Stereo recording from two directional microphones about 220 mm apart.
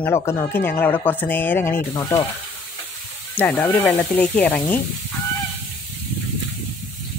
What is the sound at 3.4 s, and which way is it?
Speech, 10° left (ahead or behind).